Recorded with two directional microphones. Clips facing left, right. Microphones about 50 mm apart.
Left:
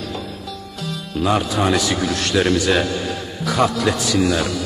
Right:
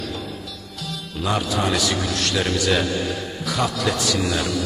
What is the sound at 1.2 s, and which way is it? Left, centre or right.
Speech, left.